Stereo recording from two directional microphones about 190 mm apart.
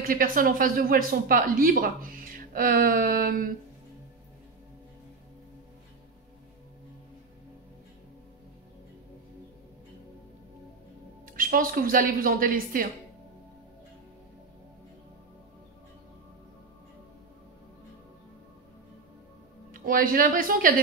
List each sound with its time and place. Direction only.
0.0 s a woman's voice: 50° right (ahead or behind)
11.3 s a woman's voice: 50° right (ahead or behind)
19.7 s a woman's voice: 50° right (ahead or behind)